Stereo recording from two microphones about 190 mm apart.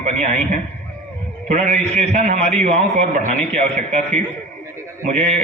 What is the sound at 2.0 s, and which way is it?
A man's voice, 35° right (ahead or behind).